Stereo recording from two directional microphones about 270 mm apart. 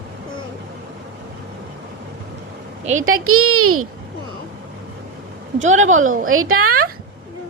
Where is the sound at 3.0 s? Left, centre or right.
Right.